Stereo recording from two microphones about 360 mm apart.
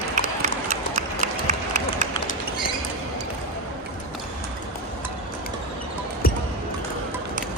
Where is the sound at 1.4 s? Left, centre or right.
Centre.